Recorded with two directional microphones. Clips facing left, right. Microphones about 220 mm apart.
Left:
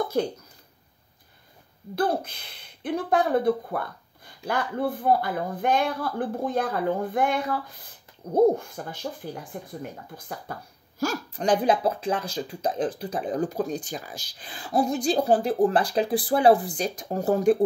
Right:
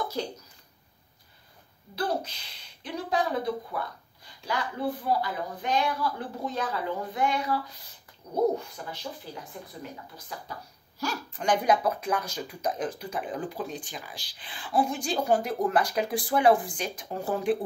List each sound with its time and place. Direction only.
0.2 s speech: 55° left (ahead or behind)
2.0 s speech: 55° left (ahead or behind)